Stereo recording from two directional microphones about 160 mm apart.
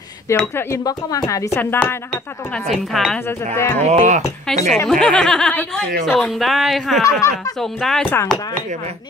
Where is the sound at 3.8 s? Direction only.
50° right (ahead or behind).